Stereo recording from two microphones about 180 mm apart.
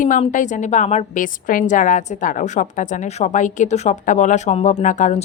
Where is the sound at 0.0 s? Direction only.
45° left (ahead or behind).